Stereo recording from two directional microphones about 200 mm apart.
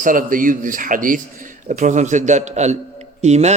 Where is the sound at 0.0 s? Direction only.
40° right (ahead or behind).